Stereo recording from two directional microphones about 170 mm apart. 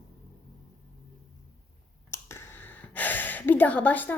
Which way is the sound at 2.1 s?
15° left (ahead or behind).